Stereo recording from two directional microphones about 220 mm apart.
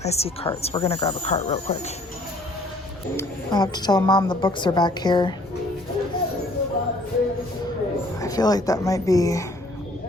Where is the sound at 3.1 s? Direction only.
20° left (ahead or behind).